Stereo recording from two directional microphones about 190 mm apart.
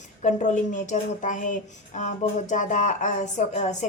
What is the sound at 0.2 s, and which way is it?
A woman's voice, 40° left (ahead or behind).